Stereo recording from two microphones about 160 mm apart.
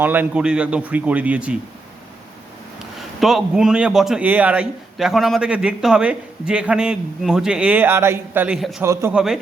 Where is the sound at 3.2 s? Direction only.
Centre (ahead or behind); by 9.1 s 15° right (ahead or behind).